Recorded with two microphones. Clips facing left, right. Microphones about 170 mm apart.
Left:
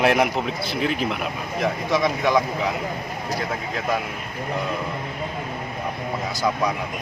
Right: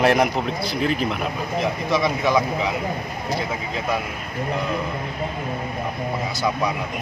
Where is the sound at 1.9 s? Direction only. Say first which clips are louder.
Even; 15° left (ahead or behind).